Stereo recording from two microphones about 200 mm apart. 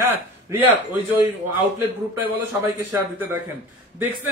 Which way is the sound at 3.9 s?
10° right (ahead or behind).